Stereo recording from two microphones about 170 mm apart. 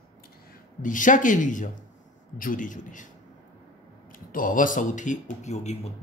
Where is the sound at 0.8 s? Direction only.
50° left (ahead or behind).